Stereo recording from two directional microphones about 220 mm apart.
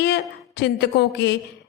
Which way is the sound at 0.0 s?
50° left (ahead or behind).